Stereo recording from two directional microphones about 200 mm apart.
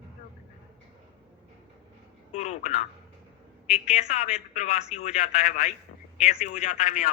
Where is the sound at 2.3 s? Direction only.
35° left (ahead or behind).